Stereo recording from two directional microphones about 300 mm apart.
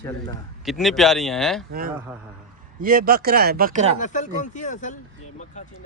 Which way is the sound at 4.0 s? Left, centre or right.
Left.